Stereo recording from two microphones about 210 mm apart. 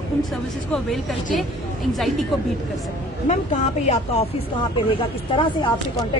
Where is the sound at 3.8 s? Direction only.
30° left (ahead or behind).